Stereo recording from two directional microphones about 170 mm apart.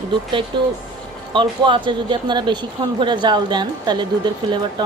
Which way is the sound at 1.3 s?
30° right (ahead or behind).